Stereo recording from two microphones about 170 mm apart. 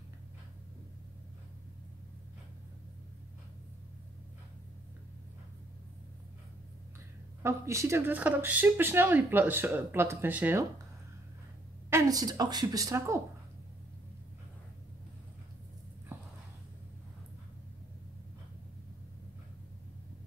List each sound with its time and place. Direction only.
7.4 s speech: 15° right (ahead or behind)
11.9 s a woman's voice: 20° right (ahead or behind)
16.1 s a sound: 10° right (ahead or behind)